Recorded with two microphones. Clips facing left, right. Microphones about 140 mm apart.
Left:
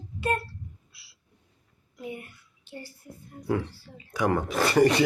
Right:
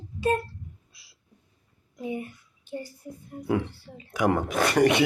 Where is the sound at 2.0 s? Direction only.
20° right (ahead or behind).